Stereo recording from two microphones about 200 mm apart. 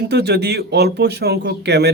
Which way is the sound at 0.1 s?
55° right (ahead or behind).